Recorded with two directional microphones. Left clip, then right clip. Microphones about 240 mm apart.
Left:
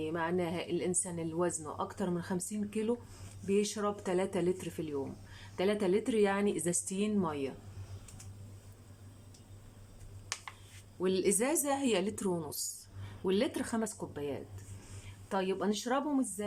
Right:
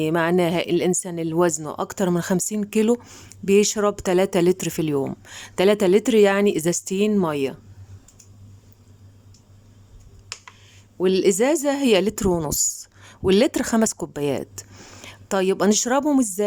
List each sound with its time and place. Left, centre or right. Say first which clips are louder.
0.0 s speech: right 14 dB; right
11.0 s speech: right 13 dB; right